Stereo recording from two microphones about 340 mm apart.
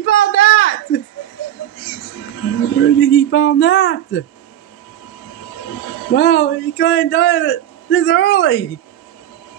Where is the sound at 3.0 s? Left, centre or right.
Left.